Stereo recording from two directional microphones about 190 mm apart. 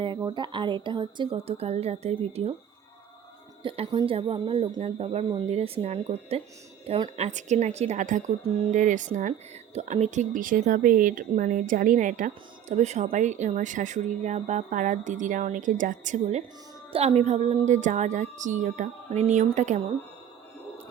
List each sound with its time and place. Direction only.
0.3 s a woman's voice: 25° right (ahead or behind)
3.6 s speech: 25° right (ahead or behind)